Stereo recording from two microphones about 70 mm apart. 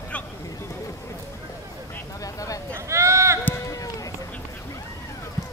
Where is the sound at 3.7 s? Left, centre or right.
Left.